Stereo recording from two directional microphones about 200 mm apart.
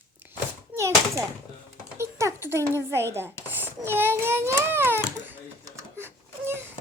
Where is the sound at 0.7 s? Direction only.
15° right (ahead or behind).